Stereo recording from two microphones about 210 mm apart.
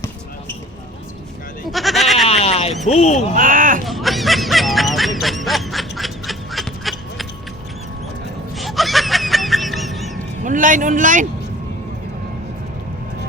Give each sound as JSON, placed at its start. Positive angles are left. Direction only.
{"t": 1.7, "sound": "goat", "side_deg": 0}
{"t": 2.2, "sound": "a sound", "side_deg": 30}
{"t": 2.8, "sound": "speech", "side_deg": 30}
{"t": 3.3, "sound": "a man's voice", "side_deg": -40}
{"t": 3.8, "sound": "snicker", "side_deg": 0}
{"t": 8.5, "sound": "snicker", "side_deg": 0}
{"t": 10.4, "sound": "a man's voice", "side_deg": -40}